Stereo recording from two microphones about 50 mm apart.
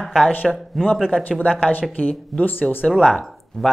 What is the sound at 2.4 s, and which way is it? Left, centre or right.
Speech, left.